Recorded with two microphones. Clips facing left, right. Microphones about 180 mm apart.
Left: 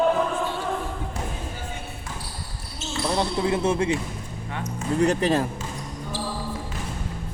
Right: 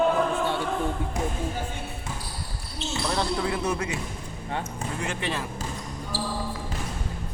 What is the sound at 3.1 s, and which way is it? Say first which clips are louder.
Speech: left 5 dB; 20° left (ahead or behind).